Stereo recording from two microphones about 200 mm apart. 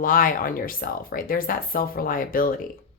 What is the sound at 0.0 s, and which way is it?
Speech, 45° left (ahead or behind).